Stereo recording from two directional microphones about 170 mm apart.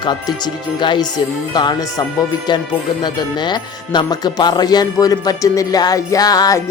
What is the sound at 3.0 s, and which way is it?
Speech, 25° left (ahead or behind).